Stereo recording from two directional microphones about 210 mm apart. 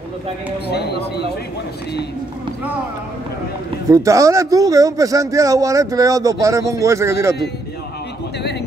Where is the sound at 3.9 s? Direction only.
15° right (ahead or behind).